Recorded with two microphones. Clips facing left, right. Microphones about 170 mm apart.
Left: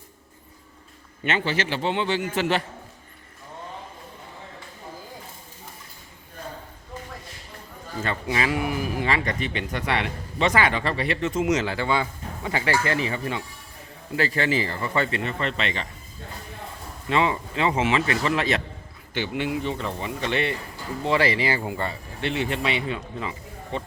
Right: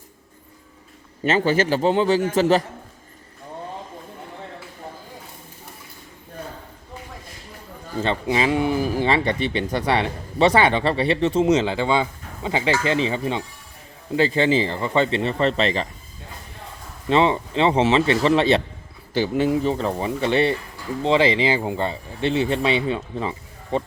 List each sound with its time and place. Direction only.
1.2 s a man's voice: 40° right (ahead or behind)
8.0 s speech: 25° right (ahead or behind)
17.1 s a man's voice: 30° right (ahead or behind)
21.0 s a man's voice: 20° right (ahead or behind); by 23.9 s 35° right (ahead or behind)